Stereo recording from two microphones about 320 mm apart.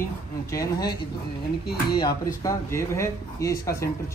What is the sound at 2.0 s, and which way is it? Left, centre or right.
Speech, centre.